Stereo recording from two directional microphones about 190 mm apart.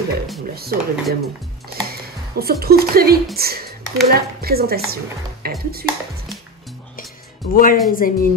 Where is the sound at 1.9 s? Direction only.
55° right (ahead or behind).